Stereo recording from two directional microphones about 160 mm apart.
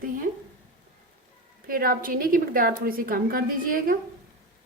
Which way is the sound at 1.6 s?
60° right (ahead or behind).